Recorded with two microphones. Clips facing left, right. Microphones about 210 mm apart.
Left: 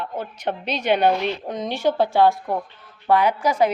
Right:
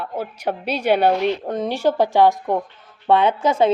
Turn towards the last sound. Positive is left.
turn(degrees=-25)  # may be behind; listen again after turning